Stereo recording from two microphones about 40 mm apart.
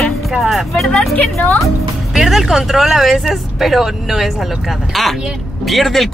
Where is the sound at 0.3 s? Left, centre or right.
Centre.